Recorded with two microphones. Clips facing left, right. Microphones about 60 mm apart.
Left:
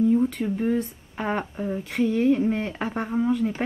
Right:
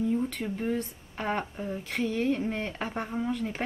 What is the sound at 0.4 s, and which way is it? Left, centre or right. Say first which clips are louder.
Speech: left 6 dB; centre.